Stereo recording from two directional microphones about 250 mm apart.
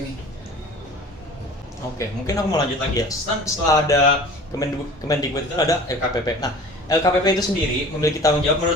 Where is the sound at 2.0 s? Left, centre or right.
Centre.